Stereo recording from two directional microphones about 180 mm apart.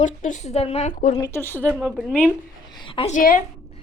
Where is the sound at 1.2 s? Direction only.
15° left (ahead or behind).